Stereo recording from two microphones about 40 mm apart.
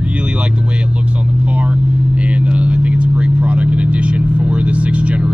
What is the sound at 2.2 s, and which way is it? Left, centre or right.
Vehicle, right.